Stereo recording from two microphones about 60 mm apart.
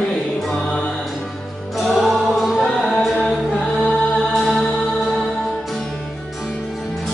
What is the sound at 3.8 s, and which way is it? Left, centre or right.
Music, centre.